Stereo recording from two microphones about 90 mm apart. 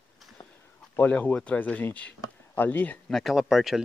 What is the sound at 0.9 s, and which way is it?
Speech, 20° left (ahead or behind).